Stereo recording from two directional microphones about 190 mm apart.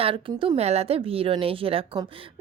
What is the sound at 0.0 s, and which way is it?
Speech, 30° right (ahead or behind).